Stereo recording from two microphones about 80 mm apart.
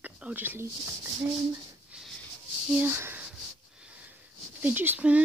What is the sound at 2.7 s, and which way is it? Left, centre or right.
Speech, right.